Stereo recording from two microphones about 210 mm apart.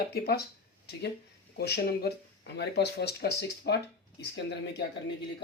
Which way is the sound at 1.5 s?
50° left (ahead or behind).